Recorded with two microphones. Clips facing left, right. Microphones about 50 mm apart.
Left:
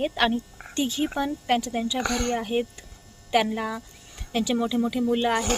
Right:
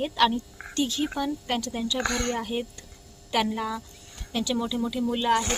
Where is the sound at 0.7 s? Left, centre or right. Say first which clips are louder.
Left 1 dB; left.